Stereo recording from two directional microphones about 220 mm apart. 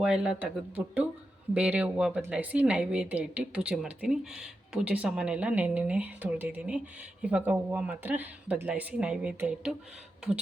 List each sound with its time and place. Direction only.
0.0 s a woman's voice: 5° right (ahead or behind)